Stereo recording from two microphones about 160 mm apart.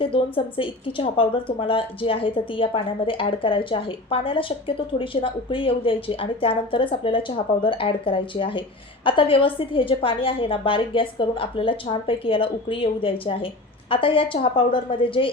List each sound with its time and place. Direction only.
0.0 s a woman's voice: 35° left (ahead or behind)